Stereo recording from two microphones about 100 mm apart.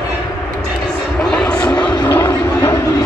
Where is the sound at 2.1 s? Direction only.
25° left (ahead or behind).